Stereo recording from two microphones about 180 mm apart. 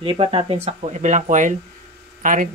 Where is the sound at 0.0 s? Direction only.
30° right (ahead or behind).